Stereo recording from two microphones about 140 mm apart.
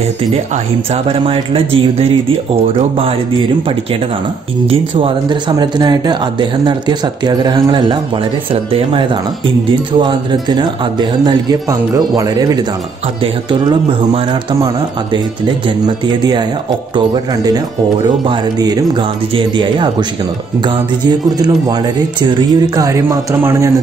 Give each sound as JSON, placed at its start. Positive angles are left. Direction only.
{"t": 1.0, "sound": "speech", "side_deg": -40}
{"t": 16.9, "sound": "speech", "side_deg": -30}
{"t": 21.4, "sound": "speech", "side_deg": -25}